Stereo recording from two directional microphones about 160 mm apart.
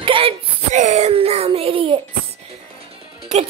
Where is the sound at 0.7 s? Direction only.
45° right (ahead or behind).